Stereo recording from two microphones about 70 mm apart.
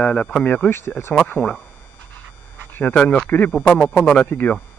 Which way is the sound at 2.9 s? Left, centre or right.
Centre.